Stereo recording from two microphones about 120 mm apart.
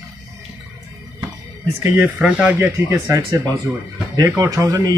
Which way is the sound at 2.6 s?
25° right (ahead or behind).